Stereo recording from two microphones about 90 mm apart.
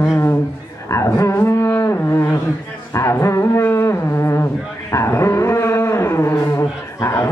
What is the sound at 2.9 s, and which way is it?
Music, 30° left (ahead or behind).